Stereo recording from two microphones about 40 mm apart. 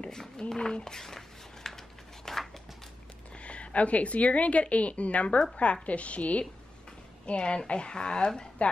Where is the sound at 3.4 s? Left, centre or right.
Left.